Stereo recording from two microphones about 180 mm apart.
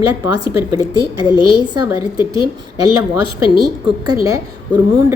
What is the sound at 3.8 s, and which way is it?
Speech, 25° right (ahead or behind).